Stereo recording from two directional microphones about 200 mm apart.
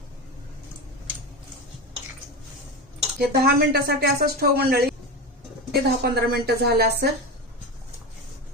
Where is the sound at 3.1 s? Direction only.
50° right (ahead or behind).